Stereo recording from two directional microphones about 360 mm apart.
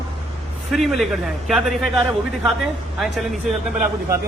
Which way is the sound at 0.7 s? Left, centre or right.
Centre.